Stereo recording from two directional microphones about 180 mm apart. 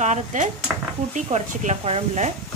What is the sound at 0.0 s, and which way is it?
Speech, 40° right (ahead or behind).